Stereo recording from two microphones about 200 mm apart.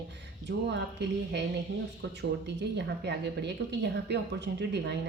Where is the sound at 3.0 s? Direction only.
60° right (ahead or behind).